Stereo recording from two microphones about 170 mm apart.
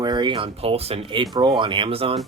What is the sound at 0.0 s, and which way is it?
Speech, 25° right (ahead or behind).